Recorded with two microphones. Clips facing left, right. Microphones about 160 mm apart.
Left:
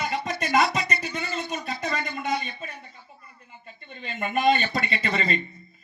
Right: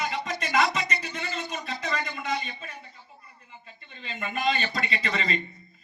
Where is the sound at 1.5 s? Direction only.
45° left (ahead or behind).